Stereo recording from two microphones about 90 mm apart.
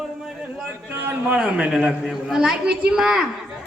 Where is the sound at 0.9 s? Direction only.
20° right (ahead or behind).